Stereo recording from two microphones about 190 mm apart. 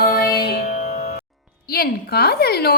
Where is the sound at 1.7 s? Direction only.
55° left (ahead or behind).